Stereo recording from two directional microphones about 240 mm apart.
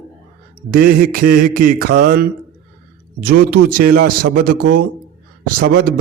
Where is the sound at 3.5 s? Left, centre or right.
Right.